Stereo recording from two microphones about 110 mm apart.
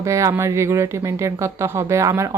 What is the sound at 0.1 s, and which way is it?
A woman's voice, 30° right (ahead or behind).